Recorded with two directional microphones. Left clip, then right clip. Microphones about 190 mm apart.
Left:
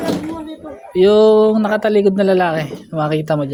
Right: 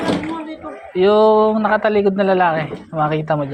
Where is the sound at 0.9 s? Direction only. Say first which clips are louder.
Left 2 dB; 50° left (ahead or behind).